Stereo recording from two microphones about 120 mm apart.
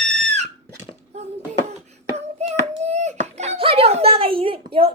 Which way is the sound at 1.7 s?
65° right (ahead or behind).